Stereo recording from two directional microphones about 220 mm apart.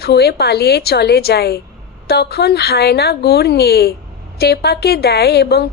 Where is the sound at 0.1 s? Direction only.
45° left (ahead or behind).